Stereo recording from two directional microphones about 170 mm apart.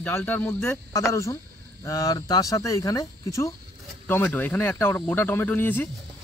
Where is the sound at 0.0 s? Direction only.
10° left (ahead or behind).